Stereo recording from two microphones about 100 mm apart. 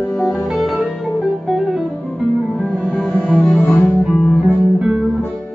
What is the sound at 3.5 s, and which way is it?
Music, 20° left (ahead or behind).